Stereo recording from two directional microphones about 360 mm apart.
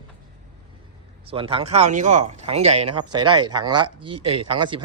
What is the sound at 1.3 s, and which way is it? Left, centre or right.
Speech, centre.